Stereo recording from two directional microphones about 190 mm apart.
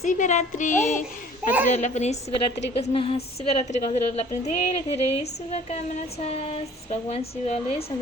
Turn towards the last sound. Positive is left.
turn(degrees=35)  # may be behind; listen again after turning